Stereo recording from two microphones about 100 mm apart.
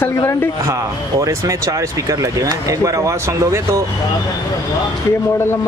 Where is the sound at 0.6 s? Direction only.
35° right (ahead or behind).